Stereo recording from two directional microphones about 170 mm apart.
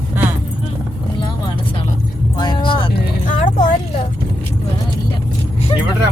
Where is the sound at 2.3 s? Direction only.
25° left (ahead or behind).